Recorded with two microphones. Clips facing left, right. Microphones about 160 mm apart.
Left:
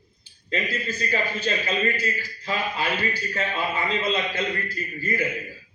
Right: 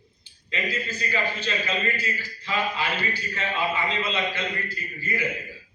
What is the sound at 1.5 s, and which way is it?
A man's voice, 45° left (ahead or behind).